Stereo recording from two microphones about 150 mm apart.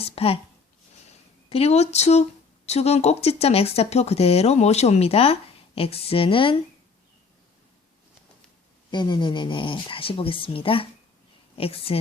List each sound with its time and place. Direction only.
0.0 s a sound: 40° left (ahead or behind)
1.5 s speech: 40° left (ahead or behind)
8.9 s speech: 30° left (ahead or behind)